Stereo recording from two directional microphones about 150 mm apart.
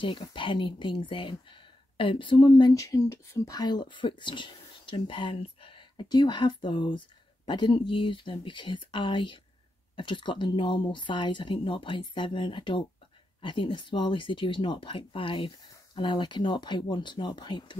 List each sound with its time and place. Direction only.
0.0 s speech: 35° left (ahead or behind)